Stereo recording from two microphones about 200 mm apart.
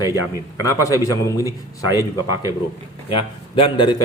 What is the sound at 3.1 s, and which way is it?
Speech, 25° left (ahead or behind).